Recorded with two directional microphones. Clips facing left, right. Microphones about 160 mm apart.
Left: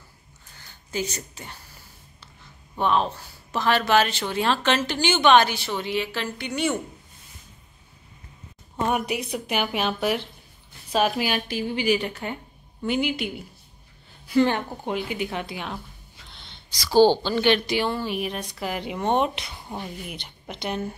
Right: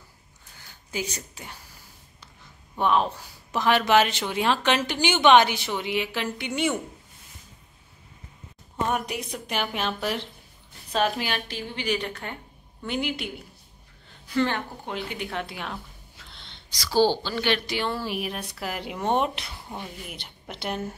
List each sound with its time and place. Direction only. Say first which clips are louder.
0.9 s speech: left 3 dB; 10° right (ahead or behind)
2.8 s speech: even; 10° right (ahead or behind)
8.8 s speech: left 3 dB; 10° left (ahead or behind)
14.2 s speech: left 5 dB; 15° left (ahead or behind)
16.8 s speech: left 5 dB; 20° left (ahead or behind)
17.9 s speech: left 2 dB; centre (ahead or behind)